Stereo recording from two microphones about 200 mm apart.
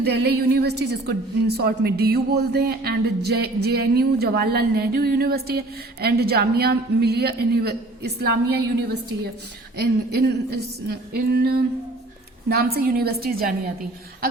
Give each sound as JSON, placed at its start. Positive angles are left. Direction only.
{"t": 0.0, "sound": "a woman's voice", "side_deg": -55}